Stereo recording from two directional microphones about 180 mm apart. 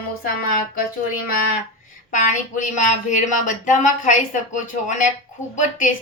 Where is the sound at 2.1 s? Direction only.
45° left (ahead or behind).